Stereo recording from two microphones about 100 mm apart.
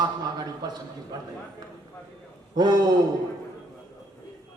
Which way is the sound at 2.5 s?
40° right (ahead or behind).